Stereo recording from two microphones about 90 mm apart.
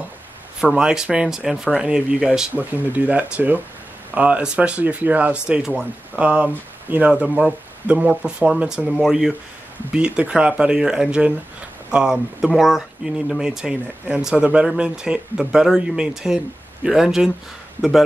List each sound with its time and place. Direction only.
0.6 s speech: 10° right (ahead or behind)
2.5 s speech: 20° right (ahead or behind); by 17.3 s 5° right (ahead or behind)